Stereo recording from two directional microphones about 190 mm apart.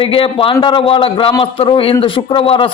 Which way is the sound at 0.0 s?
30° left (ahead or behind).